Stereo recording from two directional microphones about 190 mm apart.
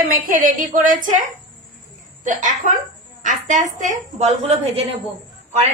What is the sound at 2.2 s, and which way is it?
A woman's voice, 40° right (ahead or behind).